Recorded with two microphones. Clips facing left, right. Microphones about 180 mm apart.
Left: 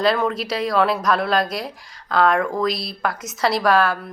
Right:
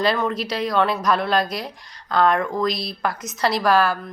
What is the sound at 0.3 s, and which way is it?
A woman's voice, centre (ahead or behind).